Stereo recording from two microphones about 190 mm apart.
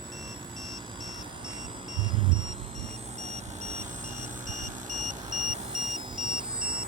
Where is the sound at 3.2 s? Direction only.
35° right (ahead or behind).